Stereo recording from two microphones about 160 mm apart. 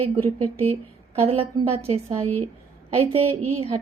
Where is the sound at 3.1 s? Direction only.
35° right (ahead or behind).